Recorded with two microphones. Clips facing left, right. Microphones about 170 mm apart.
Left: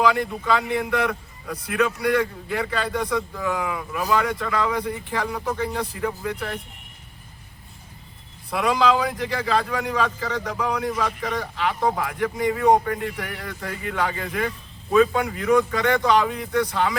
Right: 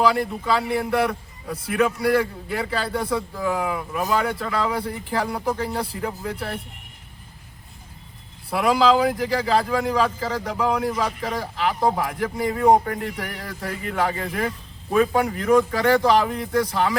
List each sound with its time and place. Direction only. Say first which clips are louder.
0.0 s a man's voice: right 1 dB; 35° right (ahead or behind)
8.4 s a man's voice: right 2 dB; 35° right (ahead or behind)